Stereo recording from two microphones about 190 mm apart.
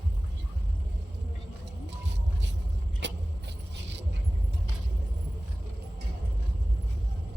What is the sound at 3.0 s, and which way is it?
Vehicle, 70° right (ahead or behind).